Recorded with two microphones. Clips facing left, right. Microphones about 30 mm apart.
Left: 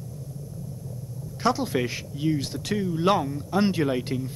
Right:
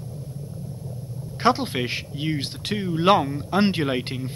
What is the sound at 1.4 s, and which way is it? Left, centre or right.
Speech, right.